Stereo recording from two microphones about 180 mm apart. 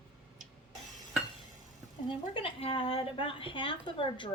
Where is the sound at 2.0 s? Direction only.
30° left (ahead or behind).